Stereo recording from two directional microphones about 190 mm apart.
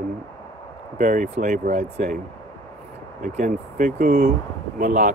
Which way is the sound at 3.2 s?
45° right (ahead or behind).